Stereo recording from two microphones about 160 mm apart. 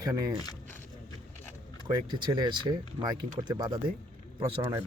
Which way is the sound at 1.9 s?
25° right (ahead or behind).